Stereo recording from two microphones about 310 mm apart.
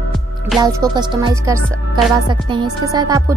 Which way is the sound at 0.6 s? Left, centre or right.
Centre.